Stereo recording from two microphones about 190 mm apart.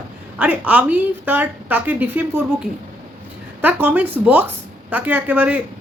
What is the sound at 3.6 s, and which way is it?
Speech, 10° right (ahead or behind).